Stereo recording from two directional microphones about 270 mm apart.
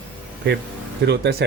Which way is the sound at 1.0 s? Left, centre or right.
Right.